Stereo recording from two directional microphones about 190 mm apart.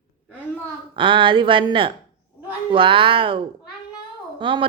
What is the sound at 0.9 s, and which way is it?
A woman's voice, 25° right (ahead or behind).